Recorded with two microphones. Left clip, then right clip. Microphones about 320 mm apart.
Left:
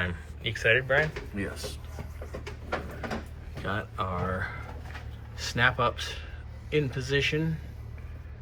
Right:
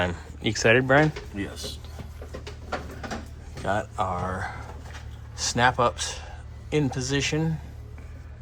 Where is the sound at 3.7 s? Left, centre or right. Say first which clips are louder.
Right 6 dB; centre.